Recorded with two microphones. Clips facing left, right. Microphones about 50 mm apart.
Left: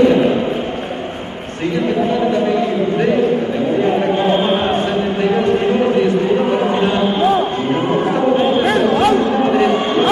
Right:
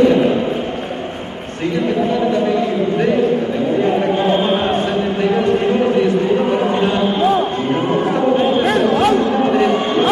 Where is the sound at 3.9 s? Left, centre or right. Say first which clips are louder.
Left 1 dB; centre.